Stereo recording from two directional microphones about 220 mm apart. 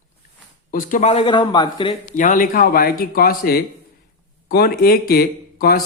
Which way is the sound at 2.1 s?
35° left (ahead or behind).